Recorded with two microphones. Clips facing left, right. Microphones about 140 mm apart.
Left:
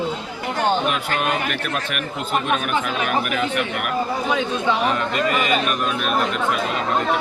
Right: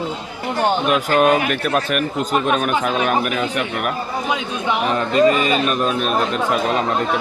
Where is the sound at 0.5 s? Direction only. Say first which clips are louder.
Right 3 dB; 40° right (ahead or behind).